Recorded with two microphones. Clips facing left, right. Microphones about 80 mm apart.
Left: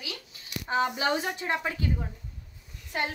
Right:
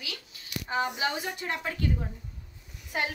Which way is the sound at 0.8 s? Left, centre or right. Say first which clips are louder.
Left 3 dB; left.